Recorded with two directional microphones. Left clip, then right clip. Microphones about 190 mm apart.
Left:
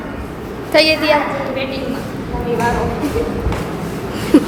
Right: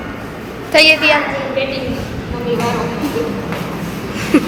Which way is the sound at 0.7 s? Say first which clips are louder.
Right 3 dB; 15° left (ahead or behind).